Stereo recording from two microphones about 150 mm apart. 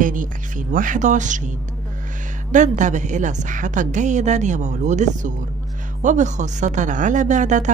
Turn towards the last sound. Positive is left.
turn(degrees=-55)  # may be behind; listen again after turning